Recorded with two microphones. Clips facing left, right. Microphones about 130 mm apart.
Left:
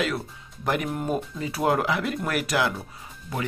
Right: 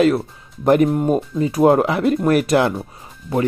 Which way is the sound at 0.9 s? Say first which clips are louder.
Right 9 dB; 30° right (ahead or behind).